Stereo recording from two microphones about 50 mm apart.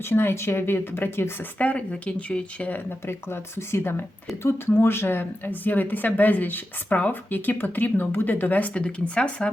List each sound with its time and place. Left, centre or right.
0.0 s speech: left
1.5 s speech: left
3.1 s speech: left
8.7 s speech: left